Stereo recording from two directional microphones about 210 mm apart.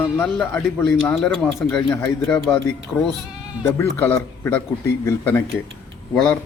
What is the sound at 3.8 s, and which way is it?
A man's voice, 10° left (ahead or behind).